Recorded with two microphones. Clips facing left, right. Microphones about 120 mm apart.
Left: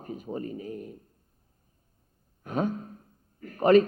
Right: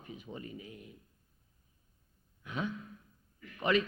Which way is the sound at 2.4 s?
45° left (ahead or behind).